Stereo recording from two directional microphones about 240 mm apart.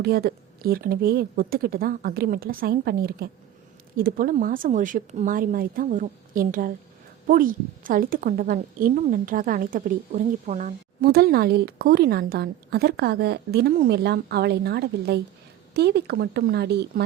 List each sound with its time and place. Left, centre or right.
0.0 s a woman's voice: right